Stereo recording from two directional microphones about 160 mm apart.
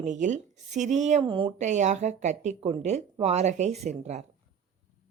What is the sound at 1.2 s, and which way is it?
Speech, 30° right (ahead or behind).